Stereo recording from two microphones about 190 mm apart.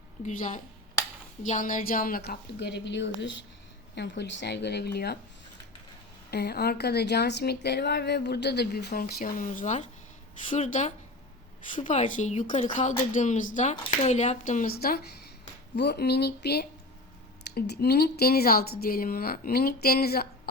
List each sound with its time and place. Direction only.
0.3 s a woman's voice: 40° left (ahead or behind); by 5.1 s 60° left (ahead or behind)
6.3 s a woman's voice: 55° left (ahead or behind)